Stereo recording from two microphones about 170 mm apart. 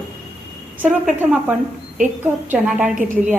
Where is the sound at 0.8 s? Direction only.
5° right (ahead or behind).